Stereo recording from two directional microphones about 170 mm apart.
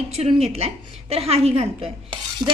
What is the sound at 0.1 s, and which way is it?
Speech, 35° right (ahead or behind).